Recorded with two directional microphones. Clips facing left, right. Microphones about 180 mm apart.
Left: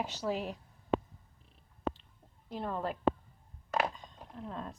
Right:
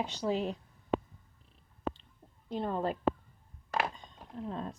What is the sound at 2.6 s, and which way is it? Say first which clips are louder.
Speech: right 3 dB; 30° right (ahead or behind).